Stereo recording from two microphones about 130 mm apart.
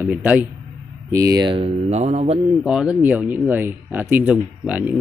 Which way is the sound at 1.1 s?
25° right (ahead or behind).